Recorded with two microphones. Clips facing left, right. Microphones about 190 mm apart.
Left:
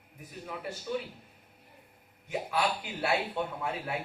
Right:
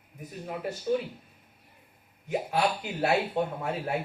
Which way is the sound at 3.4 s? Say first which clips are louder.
Right 5 dB; 45° right (ahead or behind).